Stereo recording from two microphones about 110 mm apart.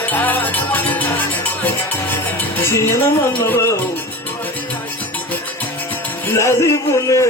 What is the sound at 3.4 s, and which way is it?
Speech, 25° left (ahead or behind).